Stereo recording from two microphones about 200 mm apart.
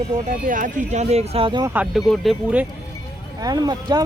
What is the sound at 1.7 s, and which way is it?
Speech, 10° right (ahead or behind).